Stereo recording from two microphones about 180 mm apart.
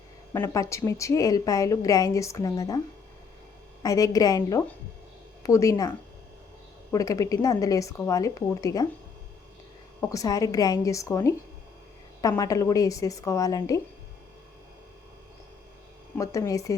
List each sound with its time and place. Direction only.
0.3 s a woman's voice: 15° left (ahead or behind)
3.8 s a woman's voice: 20° left (ahead or behind)
6.9 s a woman's voice: 20° left (ahead or behind)
10.0 s a woman's voice: 20° left (ahead or behind)
16.1 s a woman's voice: 15° left (ahead or behind)